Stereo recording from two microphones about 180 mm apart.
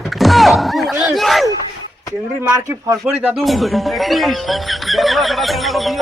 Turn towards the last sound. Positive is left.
turn(degrees=0)  # may be behind; listen again after turning